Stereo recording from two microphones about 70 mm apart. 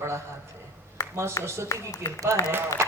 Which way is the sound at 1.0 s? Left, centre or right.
Left.